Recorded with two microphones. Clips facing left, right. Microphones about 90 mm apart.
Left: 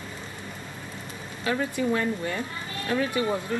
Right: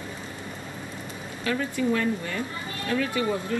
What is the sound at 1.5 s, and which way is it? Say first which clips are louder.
Speech: even; 30° left (ahead or behind).